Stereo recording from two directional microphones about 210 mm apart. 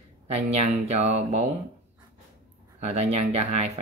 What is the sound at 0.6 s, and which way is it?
Speech, 30° right (ahead or behind).